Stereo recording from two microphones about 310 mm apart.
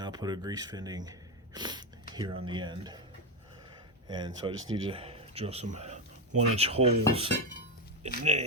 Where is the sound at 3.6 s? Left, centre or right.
Centre.